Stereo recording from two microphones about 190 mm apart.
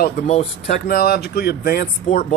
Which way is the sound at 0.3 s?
35° left (ahead or behind).